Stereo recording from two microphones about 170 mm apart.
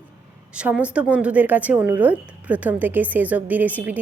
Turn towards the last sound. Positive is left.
turn(degrees=-10)  # may be behind; listen again after turning